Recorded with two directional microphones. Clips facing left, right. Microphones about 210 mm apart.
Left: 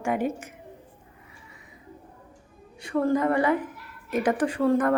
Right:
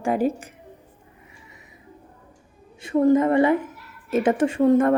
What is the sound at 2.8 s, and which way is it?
A woman's voice, 20° right (ahead or behind).